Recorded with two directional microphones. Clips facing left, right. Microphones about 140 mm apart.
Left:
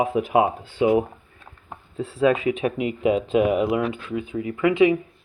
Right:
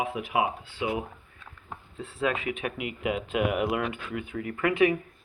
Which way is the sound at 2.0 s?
35° left (ahead or behind).